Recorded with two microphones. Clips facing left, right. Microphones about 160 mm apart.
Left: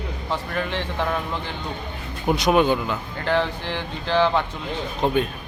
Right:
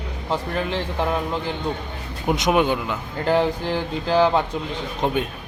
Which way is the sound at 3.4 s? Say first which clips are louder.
Right 5 dB; 40° right (ahead or behind).